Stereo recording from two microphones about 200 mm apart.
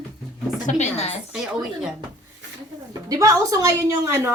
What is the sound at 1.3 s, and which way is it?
Speech, 5° right (ahead or behind).